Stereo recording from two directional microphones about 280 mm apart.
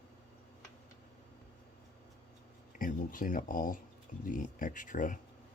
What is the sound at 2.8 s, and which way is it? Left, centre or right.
Speech, left.